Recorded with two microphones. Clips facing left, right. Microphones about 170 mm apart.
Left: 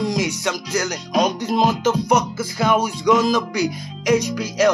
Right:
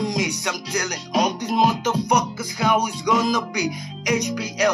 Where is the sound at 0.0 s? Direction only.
15° right (ahead or behind).